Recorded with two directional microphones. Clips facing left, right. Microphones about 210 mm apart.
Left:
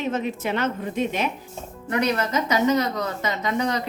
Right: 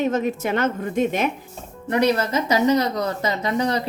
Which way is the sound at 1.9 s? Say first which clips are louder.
Right 3 dB; 35° right (ahead or behind).